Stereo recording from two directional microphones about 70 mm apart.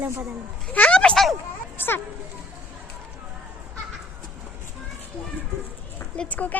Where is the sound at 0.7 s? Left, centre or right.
Centre.